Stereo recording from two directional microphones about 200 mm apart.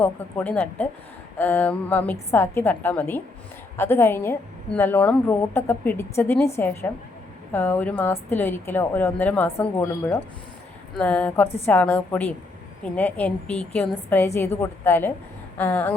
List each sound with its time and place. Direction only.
0.0 s a woman's voice: 10° left (ahead or behind)